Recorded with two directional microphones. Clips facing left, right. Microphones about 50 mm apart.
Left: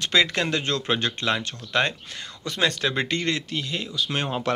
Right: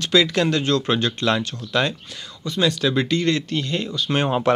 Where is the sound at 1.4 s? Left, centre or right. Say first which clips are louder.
Right 2 dB; left.